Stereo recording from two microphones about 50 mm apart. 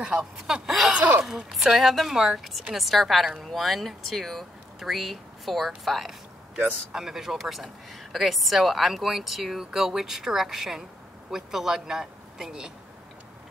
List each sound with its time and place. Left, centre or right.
0.0 s a sound: centre
0.9 s gasp: right
1.2 s speech: centre
6.5 s speech: centre
7.1 s speech: centre